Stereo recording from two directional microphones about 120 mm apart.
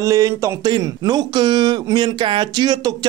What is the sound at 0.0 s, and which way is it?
Speech, 30° right (ahead or behind).